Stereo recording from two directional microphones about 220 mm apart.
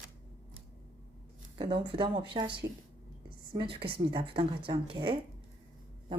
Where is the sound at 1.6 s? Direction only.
25° right (ahead or behind).